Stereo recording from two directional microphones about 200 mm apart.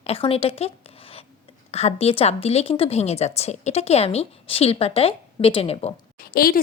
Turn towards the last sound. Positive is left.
turn(degrees=50)  # may be behind; listen again after turning